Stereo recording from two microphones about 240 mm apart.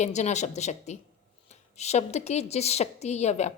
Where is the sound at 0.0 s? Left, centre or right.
Left.